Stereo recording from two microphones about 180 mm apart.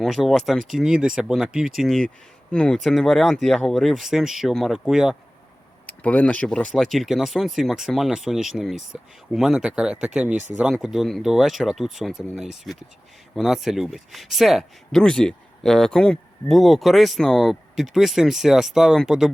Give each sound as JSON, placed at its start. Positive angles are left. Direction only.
{"t": 0.0, "sound": "speech", "side_deg": 0}
{"t": 10.3, "sound": "speech", "side_deg": -45}
{"t": 10.6, "sound": "speech", "side_deg": -5}